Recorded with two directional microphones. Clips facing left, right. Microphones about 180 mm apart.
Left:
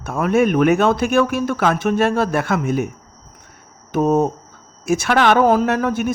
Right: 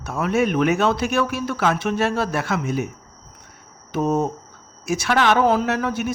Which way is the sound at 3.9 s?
50° left (ahead or behind).